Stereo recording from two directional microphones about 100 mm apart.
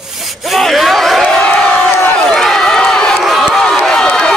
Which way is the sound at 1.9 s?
20° left (ahead or behind).